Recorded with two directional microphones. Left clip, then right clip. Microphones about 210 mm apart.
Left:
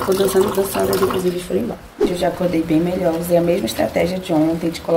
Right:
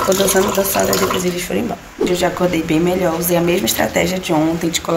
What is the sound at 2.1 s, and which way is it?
Speech, centre (ahead or behind).